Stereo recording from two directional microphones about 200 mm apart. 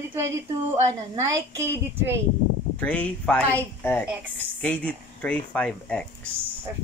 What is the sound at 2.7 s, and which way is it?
Speech, 5° left (ahead or behind).